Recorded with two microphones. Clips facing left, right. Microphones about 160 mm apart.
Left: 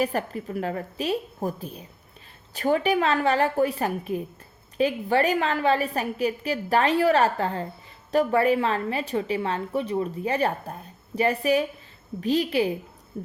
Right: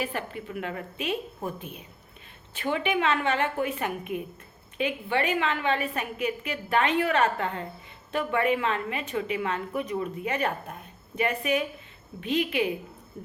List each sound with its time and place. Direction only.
0.0 s a woman's voice: 40° left (ahead or behind)